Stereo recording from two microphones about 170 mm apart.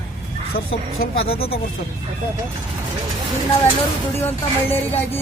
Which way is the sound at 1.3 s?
35° left (ahead or behind).